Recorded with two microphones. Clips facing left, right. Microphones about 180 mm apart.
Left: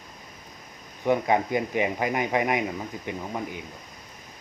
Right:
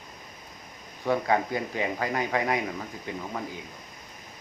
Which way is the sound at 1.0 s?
20° left (ahead or behind).